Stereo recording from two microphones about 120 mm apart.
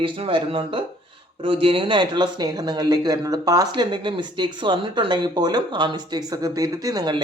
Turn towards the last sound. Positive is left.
turn(degrees=-30)  # may be behind; listen again after turning